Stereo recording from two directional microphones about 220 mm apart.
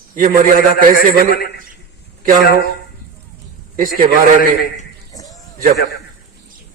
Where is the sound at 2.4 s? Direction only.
45° left (ahead or behind).